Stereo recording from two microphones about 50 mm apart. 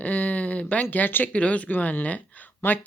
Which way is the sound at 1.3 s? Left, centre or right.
Left.